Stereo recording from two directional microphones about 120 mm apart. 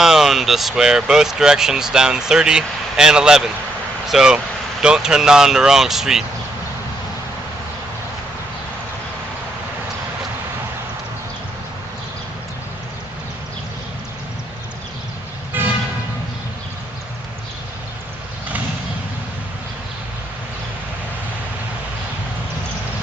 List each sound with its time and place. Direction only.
0.0 s speech: 5° right (ahead or behind)
15.5 s vehicle: 15° right (ahead or behind)